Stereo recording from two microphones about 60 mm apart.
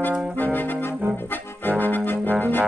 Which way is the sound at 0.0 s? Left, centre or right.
Left.